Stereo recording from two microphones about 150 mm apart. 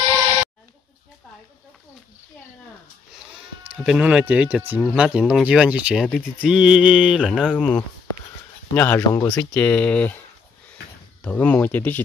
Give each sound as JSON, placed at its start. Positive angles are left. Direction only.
{"t": 3.6, "sound": "speech", "side_deg": -5}
{"t": 11.2, "sound": "speech", "side_deg": 10}